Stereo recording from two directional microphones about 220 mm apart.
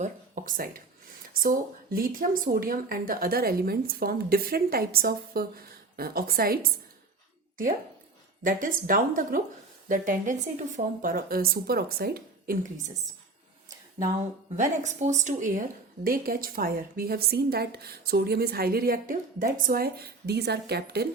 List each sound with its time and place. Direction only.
0.0 s a woman's voice: 35° right (ahead or behind)
8.4 s a woman's voice: 40° right (ahead or behind)
14.5 s a woman's voice: 35° right (ahead or behind)